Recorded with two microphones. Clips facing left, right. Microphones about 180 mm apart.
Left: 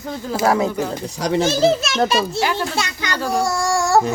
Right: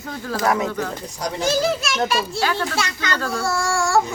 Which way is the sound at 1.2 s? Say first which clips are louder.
Left 9 dB; 70° left (ahead or behind).